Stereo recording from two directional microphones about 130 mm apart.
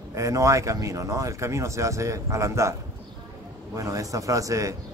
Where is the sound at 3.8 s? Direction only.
25° right (ahead or behind).